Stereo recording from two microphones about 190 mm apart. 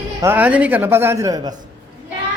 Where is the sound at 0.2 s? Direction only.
10° right (ahead or behind).